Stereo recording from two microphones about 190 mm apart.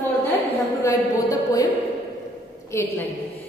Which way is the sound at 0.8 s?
20° left (ahead or behind).